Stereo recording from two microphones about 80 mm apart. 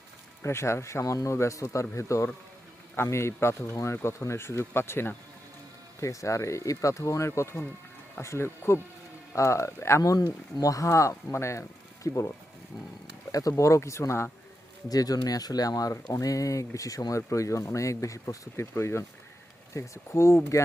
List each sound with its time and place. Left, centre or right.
0.4 s speech: left
6.0 s speech: left
13.3 s speech: left
14.8 s speech: left